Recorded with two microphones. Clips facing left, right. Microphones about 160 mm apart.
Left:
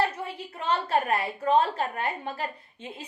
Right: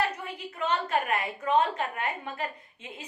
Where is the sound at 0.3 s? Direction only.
30° left (ahead or behind).